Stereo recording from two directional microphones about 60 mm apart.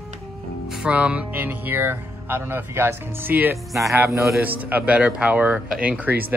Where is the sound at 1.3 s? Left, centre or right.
Right.